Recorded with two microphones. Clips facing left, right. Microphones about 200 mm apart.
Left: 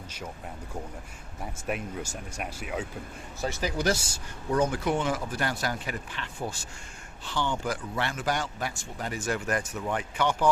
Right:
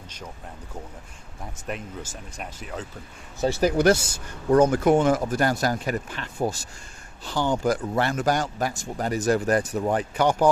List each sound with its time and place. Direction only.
1.6 s speech: 5° left (ahead or behind)
3.6 s speech: 50° right (ahead or behind)